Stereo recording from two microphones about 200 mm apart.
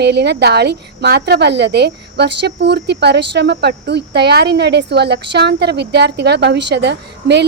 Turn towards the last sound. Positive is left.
turn(degrees=-60)  # may be behind; listen again after turning